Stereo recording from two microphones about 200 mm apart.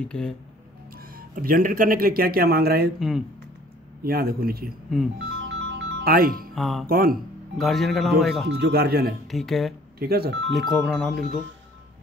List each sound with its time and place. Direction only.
0.0 s speech: 5° left (ahead or behind)
1.1 s speech: 45° right (ahead or behind)
3.0 s speech: centre (ahead or behind)
4.0 s speech: 50° right (ahead or behind)
5.4 s music: 65° right (ahead or behind); by 6.5 s 45° right (ahead or behind)
6.5 s speech: centre (ahead or behind)
6.9 s speech: 45° right (ahead or behind)
7.5 s speech: centre (ahead or behind)
8.5 s speech: 55° right (ahead or behind)
9.3 s speech: centre (ahead or behind)
9.9 s speech: 50° right (ahead or behind)
10.5 s speech: centre (ahead or behind)